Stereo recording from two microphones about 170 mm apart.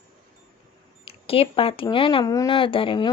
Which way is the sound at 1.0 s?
35° left (ahead or behind).